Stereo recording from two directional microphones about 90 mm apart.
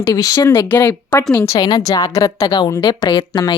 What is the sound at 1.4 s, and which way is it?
Speech, 45° left (ahead or behind).